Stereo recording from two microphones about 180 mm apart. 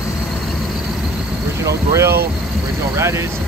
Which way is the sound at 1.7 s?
15° right (ahead or behind).